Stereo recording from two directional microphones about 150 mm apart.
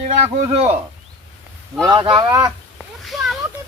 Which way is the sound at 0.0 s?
45° right (ahead or behind).